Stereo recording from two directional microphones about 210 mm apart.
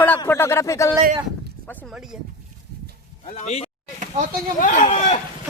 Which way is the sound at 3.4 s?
30° left (ahead or behind).